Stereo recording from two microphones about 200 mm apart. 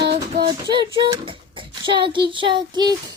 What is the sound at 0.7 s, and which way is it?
A woman's voice, 25° right (ahead or behind).